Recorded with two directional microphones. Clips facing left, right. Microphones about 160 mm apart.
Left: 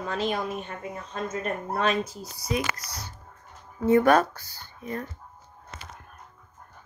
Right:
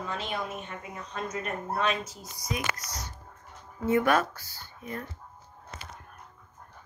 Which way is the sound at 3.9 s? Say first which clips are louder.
Left 5 dB; 40° left (ahead or behind).